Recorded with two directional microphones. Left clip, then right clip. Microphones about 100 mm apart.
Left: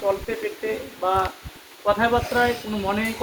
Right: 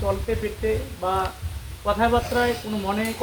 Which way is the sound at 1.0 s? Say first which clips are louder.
Left 3 dB; 5° left (ahead or behind).